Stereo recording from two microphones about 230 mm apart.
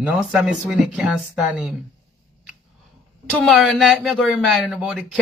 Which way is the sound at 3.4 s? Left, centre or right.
Centre.